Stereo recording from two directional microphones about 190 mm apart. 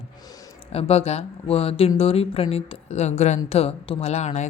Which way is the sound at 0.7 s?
30° left (ahead or behind).